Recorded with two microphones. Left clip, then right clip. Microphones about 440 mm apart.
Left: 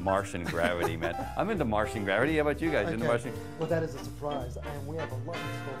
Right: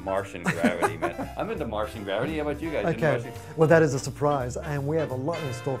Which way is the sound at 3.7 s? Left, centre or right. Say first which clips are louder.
Right 10 dB; right.